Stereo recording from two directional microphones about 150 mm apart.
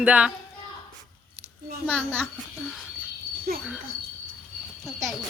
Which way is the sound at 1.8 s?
10° right (ahead or behind).